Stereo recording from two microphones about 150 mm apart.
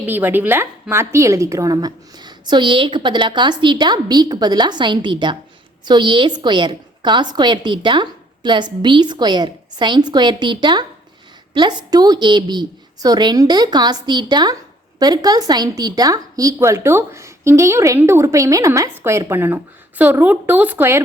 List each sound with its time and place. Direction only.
0.0 s a woman's voice: 15° right (ahead or behind)